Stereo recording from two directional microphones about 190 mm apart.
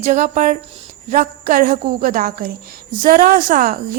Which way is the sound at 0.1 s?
40° right (ahead or behind).